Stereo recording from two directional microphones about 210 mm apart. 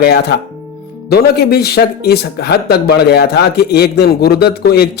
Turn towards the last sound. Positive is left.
turn(degrees=50)  # may be behind; listen again after turning